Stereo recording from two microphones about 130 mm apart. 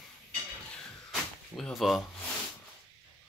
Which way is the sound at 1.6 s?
Centre (ahead or behind).